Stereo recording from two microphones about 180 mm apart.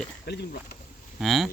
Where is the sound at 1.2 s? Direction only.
Centre (ahead or behind).